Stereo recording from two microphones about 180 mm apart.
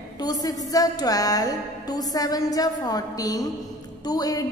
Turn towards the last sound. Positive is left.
turn(degrees=20)  # may be behind; listen again after turning